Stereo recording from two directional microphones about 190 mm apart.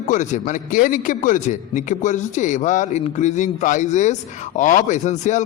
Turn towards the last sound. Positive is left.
turn(degrees=40)  # may be behind; listen again after turning